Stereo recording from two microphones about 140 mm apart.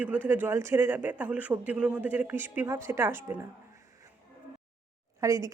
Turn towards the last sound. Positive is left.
turn(degrees=-20)  # may be behind; listen again after turning